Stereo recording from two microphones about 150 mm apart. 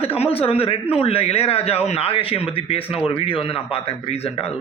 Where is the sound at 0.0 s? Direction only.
40° left (ahead or behind).